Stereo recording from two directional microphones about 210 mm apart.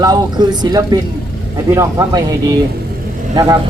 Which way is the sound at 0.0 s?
20° right (ahead or behind).